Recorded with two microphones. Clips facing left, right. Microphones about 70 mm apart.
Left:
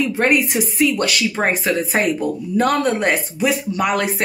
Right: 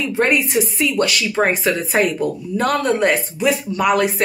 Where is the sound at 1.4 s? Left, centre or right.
Left.